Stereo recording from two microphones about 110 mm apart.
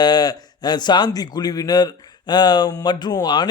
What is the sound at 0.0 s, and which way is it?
A man's voice, 40° left (ahead or behind).